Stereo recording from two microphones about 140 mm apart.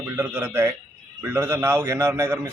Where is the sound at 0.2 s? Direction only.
15° right (ahead or behind).